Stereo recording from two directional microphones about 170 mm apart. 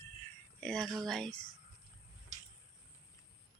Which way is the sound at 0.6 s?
5° left (ahead or behind).